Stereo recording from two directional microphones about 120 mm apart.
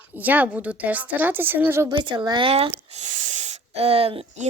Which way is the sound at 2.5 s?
55° right (ahead or behind).